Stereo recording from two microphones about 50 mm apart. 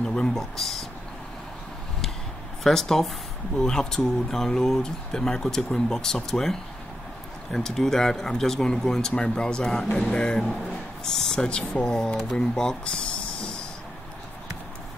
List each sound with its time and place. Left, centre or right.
0.0 s a sound: centre
0.4 s speech: centre
2.6 s speech: centre
11.4 s speech: centre